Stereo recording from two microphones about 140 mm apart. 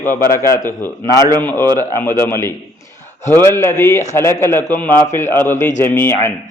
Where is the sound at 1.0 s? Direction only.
30° right (ahead or behind).